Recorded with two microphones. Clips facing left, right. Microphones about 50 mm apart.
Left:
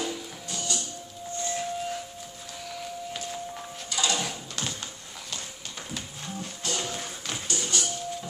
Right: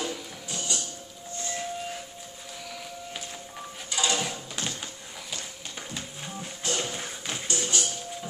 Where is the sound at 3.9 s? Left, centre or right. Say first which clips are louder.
Even; centre.